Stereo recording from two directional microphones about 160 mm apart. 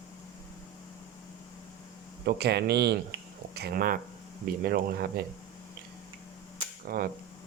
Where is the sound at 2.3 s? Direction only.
90° right; by 5.1 s 70° right (ahead or behind).